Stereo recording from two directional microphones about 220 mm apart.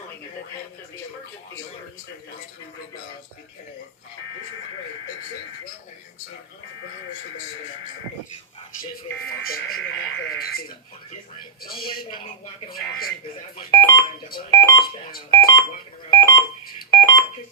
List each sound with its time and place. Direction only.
11.6 s a man's voice: 40° left (ahead or behind)
13.6 s speech: 15° left (ahead or behind)
16.0 s a sound: 15° left (ahead or behind)
16.9 s telephone dialing: 15° left (ahead or behind)